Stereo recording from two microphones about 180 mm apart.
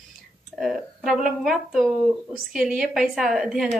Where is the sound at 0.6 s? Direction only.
Centre (ahead or behind).